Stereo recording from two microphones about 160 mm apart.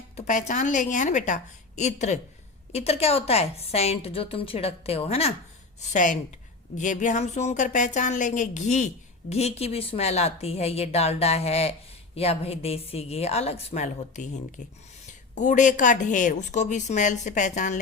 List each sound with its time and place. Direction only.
0.2 s a woman's voice: 50° left (ahead or behind)
5.9 s a woman's voice: 55° left (ahead or behind)
15.4 s a woman's voice: 50° left (ahead or behind)